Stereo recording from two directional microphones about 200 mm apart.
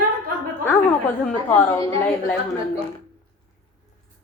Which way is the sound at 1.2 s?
10° left (ahead or behind).